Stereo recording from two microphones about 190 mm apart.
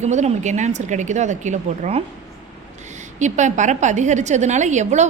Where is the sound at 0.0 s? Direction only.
35° right (ahead or behind).